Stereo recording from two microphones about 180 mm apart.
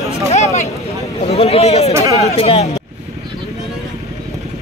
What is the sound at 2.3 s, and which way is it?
Speech, 35° left (ahead or behind).